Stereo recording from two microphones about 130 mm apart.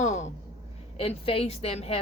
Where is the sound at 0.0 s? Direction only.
65° left (ahead or behind).